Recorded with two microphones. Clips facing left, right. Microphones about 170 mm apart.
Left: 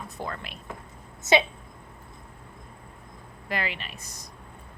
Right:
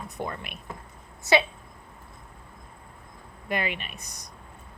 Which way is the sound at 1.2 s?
20° left (ahead or behind).